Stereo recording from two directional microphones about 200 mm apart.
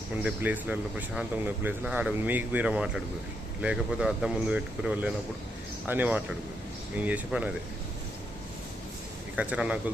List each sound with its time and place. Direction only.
0.2 s a man's voice: 5° right (ahead or behind)
9.3 s a man's voice: 5° right (ahead or behind)